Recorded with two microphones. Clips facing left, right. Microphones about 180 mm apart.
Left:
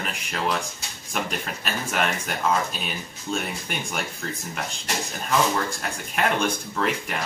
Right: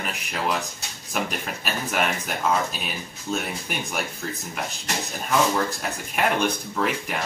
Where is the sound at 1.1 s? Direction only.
5° right (ahead or behind).